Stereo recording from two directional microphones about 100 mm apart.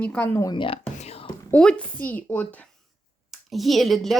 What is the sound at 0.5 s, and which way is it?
Speech, 60° left (ahead or behind).